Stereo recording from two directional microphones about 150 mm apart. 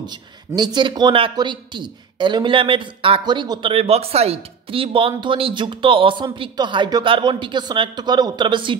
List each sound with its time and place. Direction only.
0.7 s a man's voice: 30° right (ahead or behind)